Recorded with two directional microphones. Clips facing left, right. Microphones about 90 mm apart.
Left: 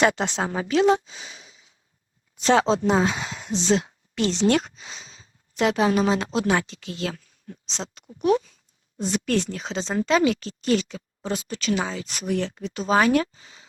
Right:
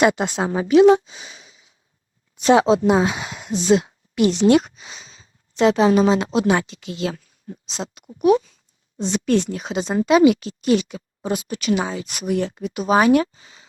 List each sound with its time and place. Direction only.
0.0 s speech: 10° right (ahead or behind)
9.0 s speech: 20° right (ahead or behind)